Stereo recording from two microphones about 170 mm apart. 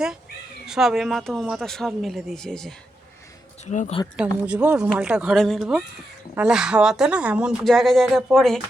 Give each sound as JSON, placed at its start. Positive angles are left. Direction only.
{"t": 0.7, "sound": "speech", "side_deg": 0}
{"t": 3.7, "sound": "speech", "side_deg": 45}
{"t": 4.2, "sound": "speech", "side_deg": -5}